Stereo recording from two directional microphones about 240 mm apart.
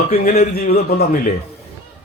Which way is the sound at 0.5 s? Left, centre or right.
Left.